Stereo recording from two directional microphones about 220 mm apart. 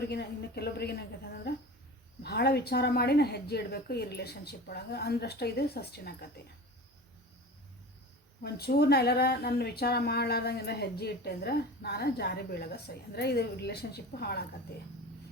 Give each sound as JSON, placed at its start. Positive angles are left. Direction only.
{"t": 0.0, "sound": "a woman's voice", "side_deg": 45}
{"t": 2.2, "sound": "a woman's voice", "side_deg": 45}
{"t": 8.4, "sound": "a woman's voice", "side_deg": 45}